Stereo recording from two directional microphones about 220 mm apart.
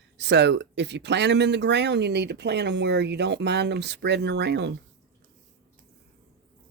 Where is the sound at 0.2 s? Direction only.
50° right (ahead or behind).